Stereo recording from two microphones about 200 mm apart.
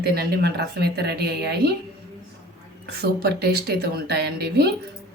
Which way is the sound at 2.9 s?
55° right (ahead or behind).